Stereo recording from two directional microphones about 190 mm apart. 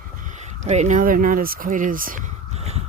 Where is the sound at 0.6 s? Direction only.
40° right (ahead or behind).